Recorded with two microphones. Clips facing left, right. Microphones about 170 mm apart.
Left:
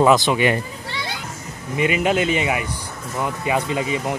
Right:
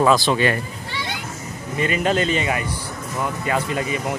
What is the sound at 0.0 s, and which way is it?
Speech, 20° left (ahead or behind).